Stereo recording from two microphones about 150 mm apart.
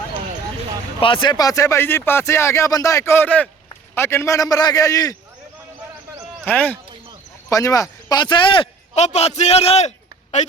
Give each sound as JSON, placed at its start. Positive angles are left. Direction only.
{"t": 0.9, "sound": "speech", "side_deg": 35}
{"t": 6.4, "sound": "speech", "side_deg": 10}
{"t": 7.5, "sound": "speech", "side_deg": 20}
{"t": 9.0, "sound": "a man's voice", "side_deg": 45}